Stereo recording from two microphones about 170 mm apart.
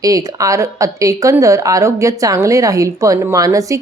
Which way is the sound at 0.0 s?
20° right (ahead or behind).